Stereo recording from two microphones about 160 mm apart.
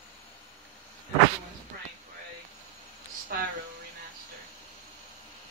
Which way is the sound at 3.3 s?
65° right (ahead or behind).